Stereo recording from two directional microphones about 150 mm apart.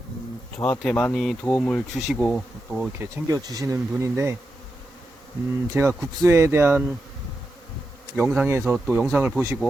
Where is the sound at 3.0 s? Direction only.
25° right (ahead or behind).